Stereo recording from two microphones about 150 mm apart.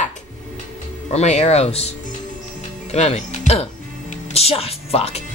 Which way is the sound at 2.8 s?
50° left (ahead or behind).